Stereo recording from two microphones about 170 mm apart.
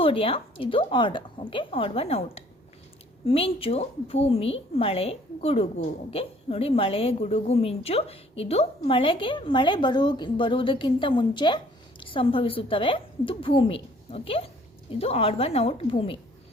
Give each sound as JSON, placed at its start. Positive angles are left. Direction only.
{"t": 0.0, "sound": "a woman's voice", "side_deg": 35}